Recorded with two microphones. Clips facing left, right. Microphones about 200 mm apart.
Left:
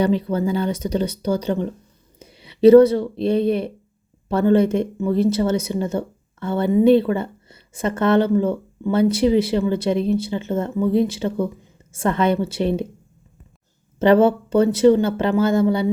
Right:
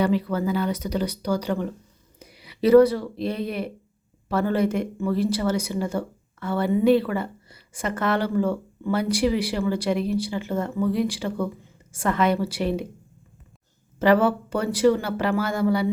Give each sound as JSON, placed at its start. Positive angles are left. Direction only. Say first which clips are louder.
{"t": 0.0, "sound": "speech", "louder": "left 3 dB", "side_deg": 25}
{"t": 14.0, "sound": "speech", "louder": "left 5 dB", "side_deg": 25}